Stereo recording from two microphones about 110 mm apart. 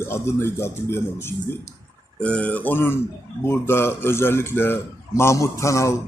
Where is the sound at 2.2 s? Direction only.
10° left (ahead or behind).